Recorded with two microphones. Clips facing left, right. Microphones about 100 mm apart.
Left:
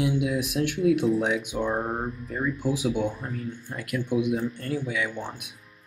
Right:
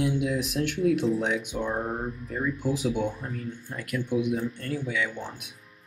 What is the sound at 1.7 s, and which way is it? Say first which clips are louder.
Speech: left 2 dB; 25° left (ahead or behind).